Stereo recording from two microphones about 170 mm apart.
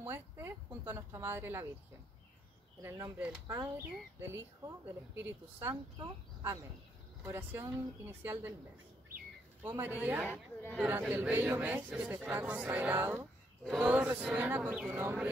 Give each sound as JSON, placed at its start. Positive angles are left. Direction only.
{"t": 0.0, "sound": "a sound", "side_deg": -15}
{"t": 3.2, "sound": "a man's voice", "side_deg": -5}
{"t": 9.6, "sound": "a man's voice", "side_deg": -15}
{"t": 10.3, "sound": "speech", "side_deg": 10}
{"t": 10.8, "sound": "a man's voice", "side_deg": -10}